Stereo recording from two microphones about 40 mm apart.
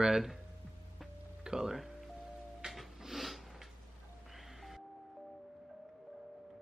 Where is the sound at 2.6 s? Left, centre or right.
Centre.